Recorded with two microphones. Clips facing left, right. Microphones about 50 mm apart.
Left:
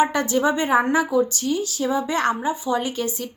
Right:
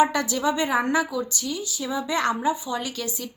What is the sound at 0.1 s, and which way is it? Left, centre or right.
Speech, left.